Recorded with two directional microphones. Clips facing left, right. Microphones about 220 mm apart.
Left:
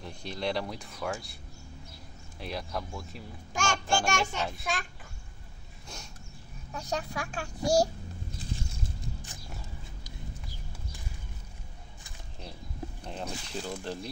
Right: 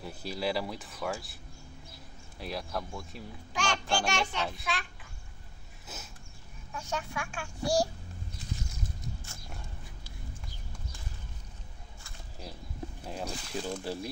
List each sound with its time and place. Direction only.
0.0 s speech: 5° right (ahead or behind)
2.4 s speech: centre (ahead or behind)
3.5 s a child's voice: 45° left (ahead or behind)
5.9 s speech: 5° right (ahead or behind)
6.7 s speech: 35° left (ahead or behind)
8.5 s a sound: 30° left (ahead or behind)
9.3 s music: 15° left (ahead or behind)
13.0 s speech: 5° right (ahead or behind)